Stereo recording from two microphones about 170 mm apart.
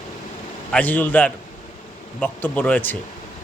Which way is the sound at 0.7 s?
10° left (ahead or behind).